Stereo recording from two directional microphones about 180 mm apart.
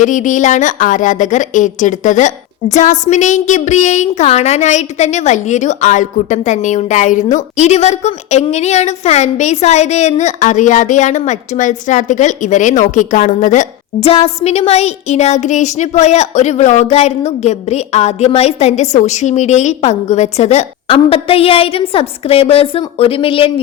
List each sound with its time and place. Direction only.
0.0 s a woman's voice: 45° left (ahead or behind)